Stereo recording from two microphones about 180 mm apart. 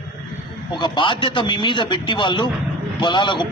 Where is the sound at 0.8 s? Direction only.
25° left (ahead or behind).